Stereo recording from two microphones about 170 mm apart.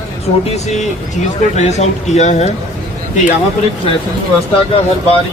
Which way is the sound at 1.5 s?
40° left (ahead or behind).